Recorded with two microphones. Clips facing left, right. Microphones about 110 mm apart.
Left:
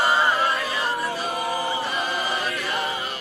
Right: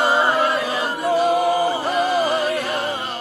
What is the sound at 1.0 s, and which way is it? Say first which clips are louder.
Chant: right 10 dB; 90° right.